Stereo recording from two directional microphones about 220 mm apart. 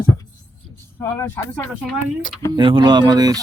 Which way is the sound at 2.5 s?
20° right (ahead or behind).